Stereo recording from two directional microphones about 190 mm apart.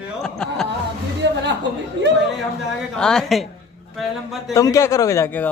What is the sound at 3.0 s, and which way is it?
Speech, 5° left (ahead or behind).